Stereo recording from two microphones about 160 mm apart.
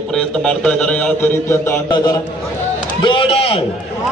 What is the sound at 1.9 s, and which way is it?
A man's voice, 25° left (ahead or behind).